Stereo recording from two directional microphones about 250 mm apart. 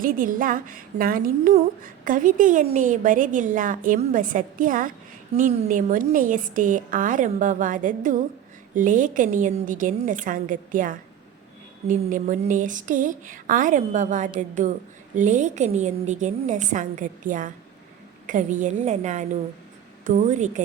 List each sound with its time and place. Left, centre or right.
0.0 s a woman's voice: right